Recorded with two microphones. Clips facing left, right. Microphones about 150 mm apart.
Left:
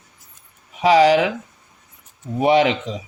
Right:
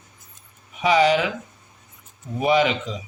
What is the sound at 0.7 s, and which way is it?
Speech, 75° left (ahead or behind).